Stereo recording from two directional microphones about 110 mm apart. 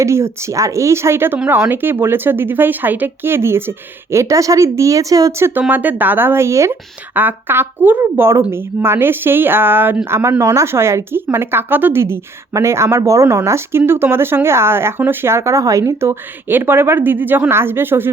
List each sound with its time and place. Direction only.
0.0 s speech: 25° right (ahead or behind)
5.5 s speech: 15° right (ahead or behind)